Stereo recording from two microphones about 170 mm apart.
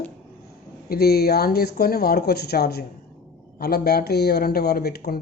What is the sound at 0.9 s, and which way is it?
Speech, 65° left (ahead or behind).